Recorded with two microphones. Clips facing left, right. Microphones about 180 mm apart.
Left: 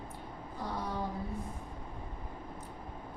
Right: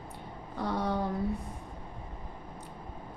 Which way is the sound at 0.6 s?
70° right (ahead or behind).